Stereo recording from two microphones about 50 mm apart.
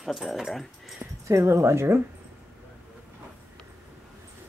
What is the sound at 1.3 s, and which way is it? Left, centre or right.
Speech, right.